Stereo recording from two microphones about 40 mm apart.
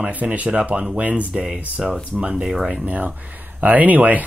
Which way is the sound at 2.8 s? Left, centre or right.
Right.